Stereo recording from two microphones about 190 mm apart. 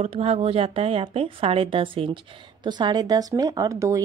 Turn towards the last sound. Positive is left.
turn(degrees=-15)  # may be behind; listen again after turning